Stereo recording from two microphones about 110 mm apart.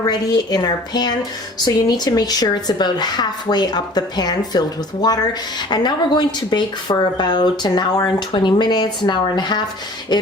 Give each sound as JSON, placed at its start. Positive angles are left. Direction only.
{"t": 0.0, "sound": "speech", "side_deg": 40}
{"t": 5.7, "sound": "speech", "side_deg": 40}